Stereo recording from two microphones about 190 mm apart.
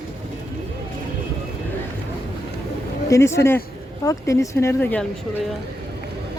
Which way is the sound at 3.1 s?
15° left (ahead or behind).